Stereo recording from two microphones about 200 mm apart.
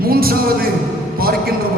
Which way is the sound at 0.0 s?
50° right (ahead or behind).